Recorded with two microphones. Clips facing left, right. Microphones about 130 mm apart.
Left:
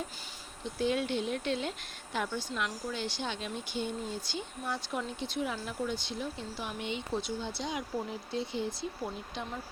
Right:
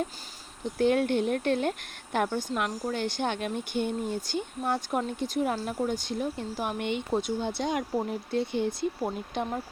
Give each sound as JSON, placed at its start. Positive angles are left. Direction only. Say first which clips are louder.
{"t": 0.8, "sound": "a woman's voice", "louder": "right 7 dB", "side_deg": -55}